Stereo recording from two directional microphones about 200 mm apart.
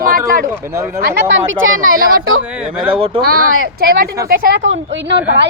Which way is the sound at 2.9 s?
25° right (ahead or behind).